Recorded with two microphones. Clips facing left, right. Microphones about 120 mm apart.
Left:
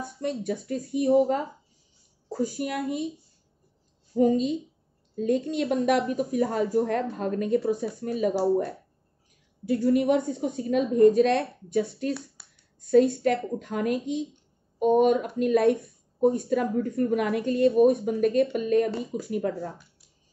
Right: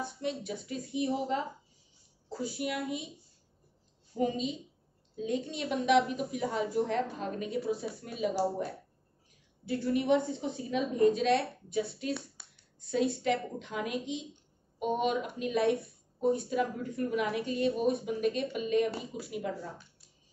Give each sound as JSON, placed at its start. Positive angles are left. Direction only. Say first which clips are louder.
{"t": 0.2, "sound": "speech", "louder": "left 10 dB", "side_deg": 50}
{"t": 4.1, "sound": "speech", "louder": "left 9 dB", "side_deg": 45}
{"t": 12.4, "sound": "a sound", "louder": "even", "side_deg": 5}
{"t": 13.1, "sound": "speech", "louder": "left 6 dB", "side_deg": 50}